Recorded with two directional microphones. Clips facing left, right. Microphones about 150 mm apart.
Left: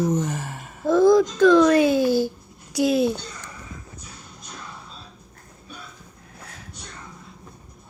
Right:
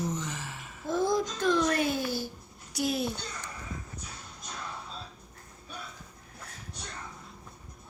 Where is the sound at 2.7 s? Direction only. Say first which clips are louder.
Left 10 dB; 90° left.